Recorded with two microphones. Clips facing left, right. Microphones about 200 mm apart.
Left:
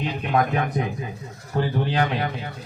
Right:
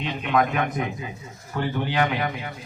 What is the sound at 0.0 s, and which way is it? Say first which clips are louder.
A man's voice: even; 30° left (ahead or behind).